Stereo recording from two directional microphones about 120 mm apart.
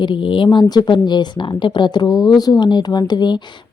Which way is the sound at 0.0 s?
45° left (ahead or behind).